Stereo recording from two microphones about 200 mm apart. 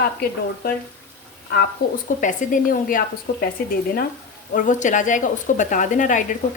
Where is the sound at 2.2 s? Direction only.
40° left (ahead or behind).